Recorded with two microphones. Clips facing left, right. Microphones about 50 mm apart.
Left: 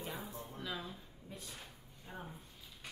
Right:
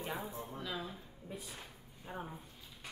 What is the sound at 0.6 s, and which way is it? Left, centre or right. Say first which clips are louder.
Speech: even; centre.